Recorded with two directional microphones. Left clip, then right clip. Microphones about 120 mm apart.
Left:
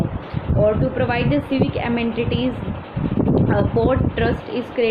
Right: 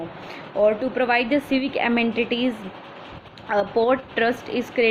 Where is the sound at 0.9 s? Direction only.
60° right (ahead or behind).